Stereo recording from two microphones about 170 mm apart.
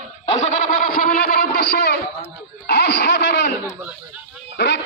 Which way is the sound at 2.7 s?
90° left.